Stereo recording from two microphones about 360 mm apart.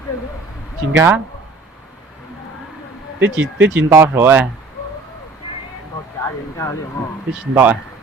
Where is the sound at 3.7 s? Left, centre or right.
Centre.